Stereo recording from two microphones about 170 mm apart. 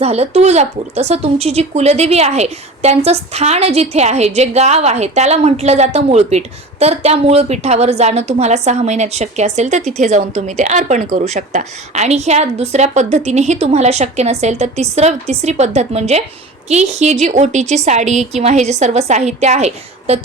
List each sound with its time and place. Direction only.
0.0 s speech: 40° right (ahead or behind)